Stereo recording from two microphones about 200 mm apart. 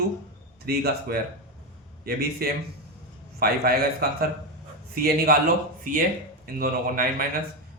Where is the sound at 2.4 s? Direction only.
50° right (ahead or behind).